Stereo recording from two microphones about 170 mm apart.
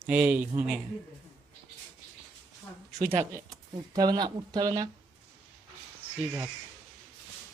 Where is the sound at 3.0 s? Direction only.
15° right (ahead or behind).